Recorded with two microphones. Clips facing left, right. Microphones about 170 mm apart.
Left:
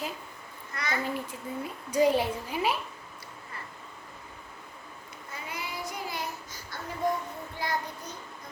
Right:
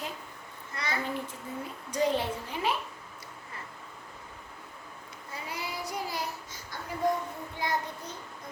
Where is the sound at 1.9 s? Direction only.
10° left (ahead or behind).